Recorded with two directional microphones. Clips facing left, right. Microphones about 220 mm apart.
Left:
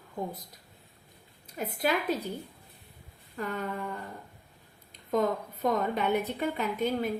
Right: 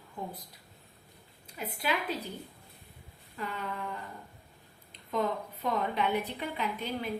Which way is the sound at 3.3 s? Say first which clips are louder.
Left 4 dB; 45° left (ahead or behind).